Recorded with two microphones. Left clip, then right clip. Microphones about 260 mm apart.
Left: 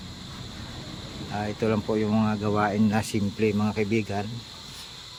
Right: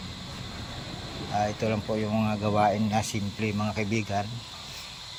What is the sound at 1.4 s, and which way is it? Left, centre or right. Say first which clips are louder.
Speech: left 1 dB; centre.